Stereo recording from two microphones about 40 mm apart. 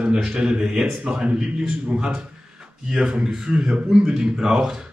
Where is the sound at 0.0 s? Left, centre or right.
Centre.